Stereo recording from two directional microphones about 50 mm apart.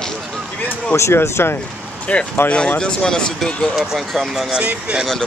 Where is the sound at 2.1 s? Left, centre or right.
Left.